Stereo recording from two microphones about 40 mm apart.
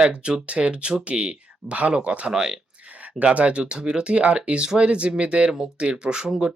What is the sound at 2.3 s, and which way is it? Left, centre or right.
Speech, centre.